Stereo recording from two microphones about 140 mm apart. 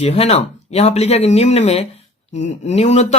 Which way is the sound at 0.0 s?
50° left (ahead or behind).